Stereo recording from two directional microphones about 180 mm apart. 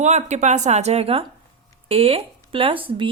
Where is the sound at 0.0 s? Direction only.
40° right (ahead or behind).